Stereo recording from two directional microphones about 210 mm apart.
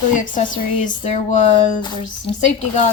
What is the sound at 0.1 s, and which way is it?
A woman's voice, 35° left (ahead or behind).